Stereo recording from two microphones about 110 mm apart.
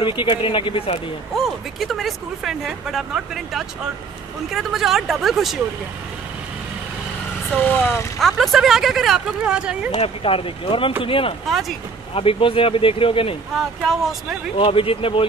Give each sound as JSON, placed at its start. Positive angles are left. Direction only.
{"t": 0.0, "sound": "speech", "side_deg": 45}
{"t": 1.3, "sound": "speech", "side_deg": 0}
{"t": 7.5, "sound": "speech", "side_deg": 15}
{"t": 8.2, "sound": "speech", "side_deg": 0}
{"t": 9.9, "sound": "speech", "side_deg": 60}
{"t": 13.6, "sound": "speech", "side_deg": 0}
{"t": 14.6, "sound": "speech", "side_deg": 55}